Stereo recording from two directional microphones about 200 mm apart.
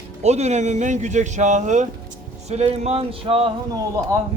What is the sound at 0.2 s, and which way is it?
Speech, 35° right (ahead or behind).